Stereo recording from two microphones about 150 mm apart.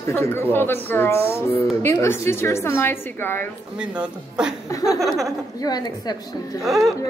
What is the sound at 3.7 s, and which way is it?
Speech, 5° right (ahead or behind).